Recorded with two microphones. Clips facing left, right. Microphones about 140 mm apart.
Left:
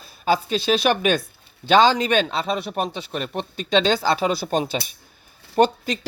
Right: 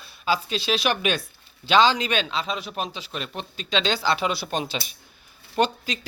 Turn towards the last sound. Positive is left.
turn(degrees=40)  # may be behind; listen again after turning